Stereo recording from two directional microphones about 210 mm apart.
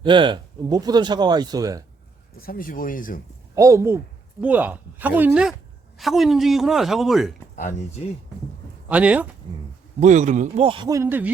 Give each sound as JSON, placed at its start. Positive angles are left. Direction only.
{"t": 0.0, "sound": "speech", "side_deg": -20}
{"t": 2.4, "sound": "speech", "side_deg": 45}
{"t": 3.5, "sound": "a woman's voice", "side_deg": -15}
{"t": 7.5, "sound": "speech", "side_deg": 35}
{"t": 8.9, "sound": "a woman's voice", "side_deg": -5}
{"t": 10.0, "sound": "speech", "side_deg": -35}